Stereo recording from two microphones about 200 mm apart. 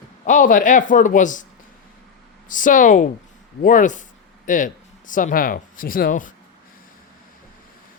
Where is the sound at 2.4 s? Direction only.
40° left (ahead or behind).